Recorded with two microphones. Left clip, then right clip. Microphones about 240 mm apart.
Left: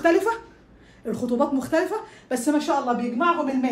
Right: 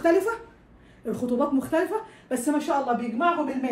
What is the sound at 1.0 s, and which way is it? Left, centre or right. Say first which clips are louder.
Speech: left 2 dB; centre.